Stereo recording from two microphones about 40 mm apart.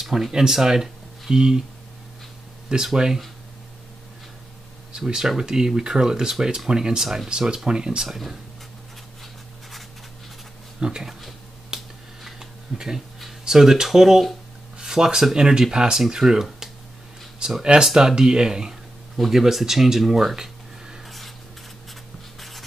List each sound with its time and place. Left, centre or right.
0.0 s speech: centre
2.7 s speech: centre
4.9 s speech: centre
8.1 s speech: centre
9.2 s a sound: centre
10.8 s speech: right
11.7 s finger snapping: centre
12.2 s tick-tock: centre
13.5 s speech: centre
17.9 s speech: centre
19.1 s speech: centre
22.4 s writing: centre